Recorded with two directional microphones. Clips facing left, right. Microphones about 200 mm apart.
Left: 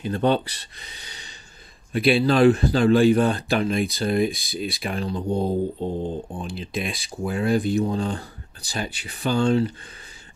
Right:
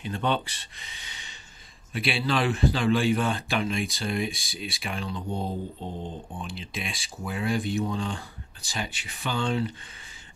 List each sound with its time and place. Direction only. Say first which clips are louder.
0.0 s speech: left 7 dB; 40° left (ahead or behind)